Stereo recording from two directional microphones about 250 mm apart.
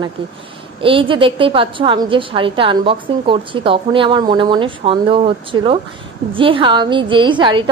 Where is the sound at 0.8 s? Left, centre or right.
Right.